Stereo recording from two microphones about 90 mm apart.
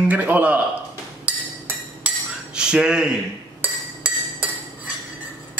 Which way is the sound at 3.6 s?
20° right (ahead or behind).